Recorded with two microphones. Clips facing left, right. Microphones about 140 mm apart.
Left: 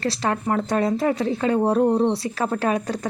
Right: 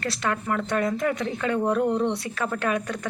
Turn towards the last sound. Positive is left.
turn(degrees=35)  # may be behind; listen again after turning